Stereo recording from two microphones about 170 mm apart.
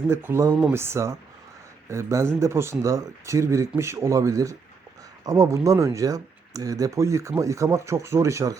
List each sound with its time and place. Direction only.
0.1 s speech: 15° right (ahead or behind)